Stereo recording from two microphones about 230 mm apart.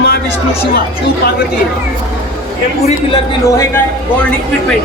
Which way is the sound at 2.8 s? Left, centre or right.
Left.